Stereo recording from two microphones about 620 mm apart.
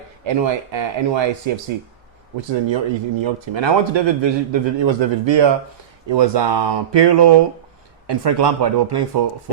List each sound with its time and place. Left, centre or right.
0.3 s a man's voice: right
2.6 s a man's voice: right